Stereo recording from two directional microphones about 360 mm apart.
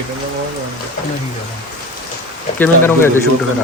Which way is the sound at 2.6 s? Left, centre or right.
Centre.